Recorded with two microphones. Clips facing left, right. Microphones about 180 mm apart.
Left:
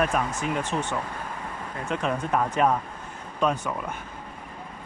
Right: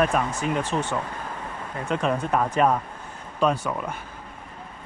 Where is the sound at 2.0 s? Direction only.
10° right (ahead or behind).